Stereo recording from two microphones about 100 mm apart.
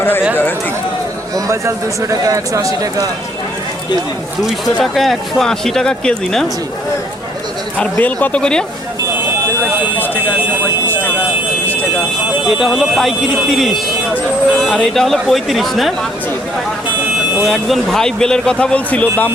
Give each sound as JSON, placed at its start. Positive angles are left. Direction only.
{"t": 1.5, "sound": "a man's voice", "side_deg": -30}
{"t": 4.8, "sound": "speech", "side_deg": 0}
{"t": 7.8, "sound": "speech", "side_deg": 15}
{"t": 11.6, "sound": "a sound", "side_deg": 20}
{"t": 12.5, "sound": "speech", "side_deg": 0}
{"t": 17.4, "sound": "speech", "side_deg": 0}